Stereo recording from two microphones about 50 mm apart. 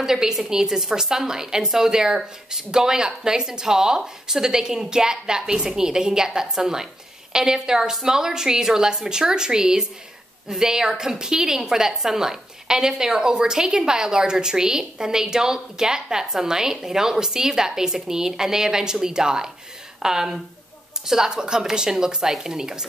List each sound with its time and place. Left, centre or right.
0.0 s a woman's voice: centre